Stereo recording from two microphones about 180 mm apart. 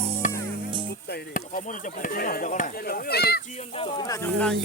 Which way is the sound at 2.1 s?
55° left (ahead or behind).